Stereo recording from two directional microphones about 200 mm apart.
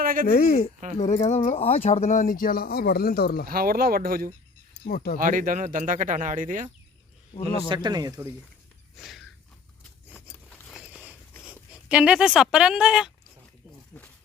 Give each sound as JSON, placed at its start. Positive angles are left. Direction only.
{"t": 0.0, "sound": "a sound", "side_deg": -45}
{"t": 0.3, "sound": "speech", "side_deg": 50}
{"t": 0.9, "sound": "speech", "side_deg": 35}
{"t": 3.4, "sound": "speech", "side_deg": -50}
{"t": 4.9, "sound": "speech", "side_deg": 50}
{"t": 5.1, "sound": "speech", "side_deg": -45}
{"t": 7.7, "sound": "speech", "side_deg": -20}
{"t": 9.0, "sound": "a sound", "side_deg": 0}
{"t": 10.5, "sound": "biting", "side_deg": 5}
{"t": 10.8, "sound": "a sound", "side_deg": -5}
{"t": 11.4, "sound": "speech", "side_deg": -5}